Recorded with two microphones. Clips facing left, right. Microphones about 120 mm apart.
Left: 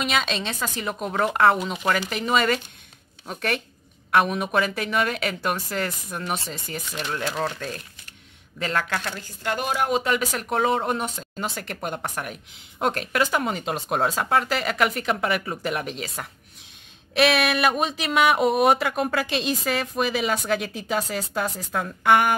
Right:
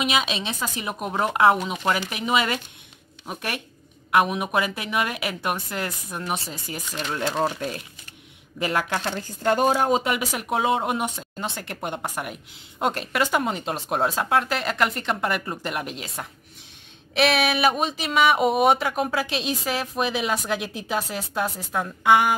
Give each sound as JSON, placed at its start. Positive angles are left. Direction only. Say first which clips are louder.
{"t": 0.0, "sound": "a woman's voice", "louder": "right 1 dB", "side_deg": -5}
{"t": 10.3, "sound": "speech", "louder": "even", "side_deg": -5}